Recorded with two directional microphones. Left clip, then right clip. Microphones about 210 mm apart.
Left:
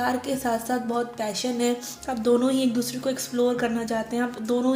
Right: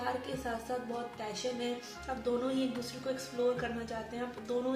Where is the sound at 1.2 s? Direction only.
45° left (ahead or behind).